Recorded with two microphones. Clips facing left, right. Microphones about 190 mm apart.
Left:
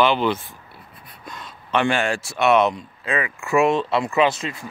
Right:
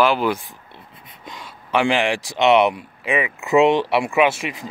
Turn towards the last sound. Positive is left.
turn(degrees=-15)  # may be behind; listen again after turning